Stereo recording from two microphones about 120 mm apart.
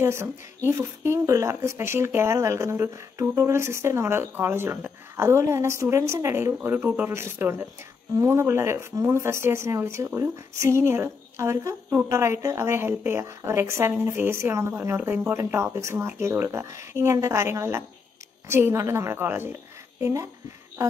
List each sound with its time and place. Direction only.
0.0 s speech: 20° right (ahead or behind)